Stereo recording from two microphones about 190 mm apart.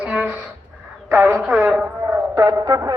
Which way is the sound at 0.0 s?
5° right (ahead or behind).